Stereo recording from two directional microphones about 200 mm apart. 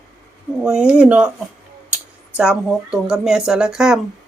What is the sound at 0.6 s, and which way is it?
Speech, 5° right (ahead or behind).